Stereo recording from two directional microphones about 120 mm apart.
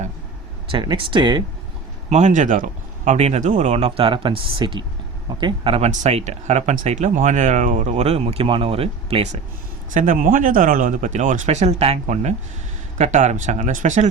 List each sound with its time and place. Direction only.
0.7 s speech: 45° right (ahead or behind)
2.0 s speech: 80° right
3.0 s speech: 70° right (ahead or behind); by 5.9 s 50° right (ahead or behind)
6.0 s speech: 70° right (ahead or behind)
9.9 s speech: 90° right; by 11.9 s 60° right (ahead or behind)
12.0 s speech: 75° right (ahead or behind)
13.0 s speech: 90° right